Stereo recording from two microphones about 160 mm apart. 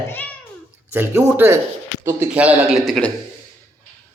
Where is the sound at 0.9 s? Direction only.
15° right (ahead or behind); by 3.1 s centre (ahead or behind).